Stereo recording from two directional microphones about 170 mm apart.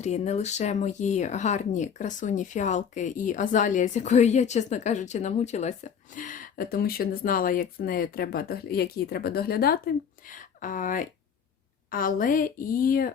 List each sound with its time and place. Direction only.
0.0 s a woman's voice: 40° left (ahead or behind); by 13.1 s 60° left (ahead or behind)